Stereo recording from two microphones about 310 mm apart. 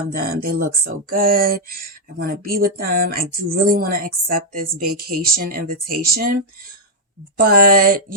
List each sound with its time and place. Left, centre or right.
0.1 s speech: right
7.4 s speech: right